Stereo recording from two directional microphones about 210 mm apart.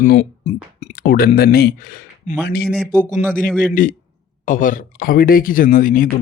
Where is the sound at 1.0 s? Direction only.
45° left (ahead or behind).